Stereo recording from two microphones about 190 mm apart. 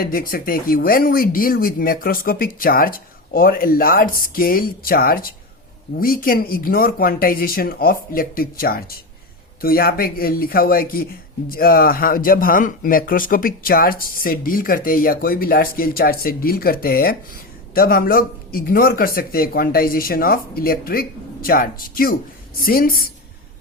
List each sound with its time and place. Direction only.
0.0 s speech: 50° left (ahead or behind)